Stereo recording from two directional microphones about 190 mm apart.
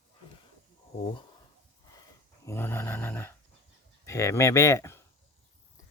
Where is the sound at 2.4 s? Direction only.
10° left (ahead or behind).